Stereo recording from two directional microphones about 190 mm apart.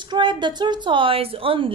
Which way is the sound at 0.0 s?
25° right (ahead or behind).